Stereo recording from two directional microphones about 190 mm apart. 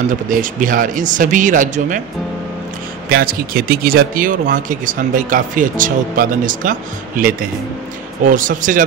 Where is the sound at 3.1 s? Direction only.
50° right (ahead or behind).